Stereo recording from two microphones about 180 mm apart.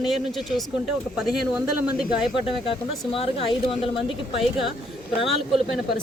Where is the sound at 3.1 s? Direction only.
30° left (ahead or behind).